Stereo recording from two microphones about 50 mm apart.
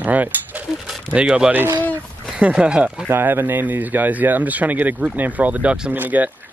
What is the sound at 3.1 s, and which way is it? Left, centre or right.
Speech, right.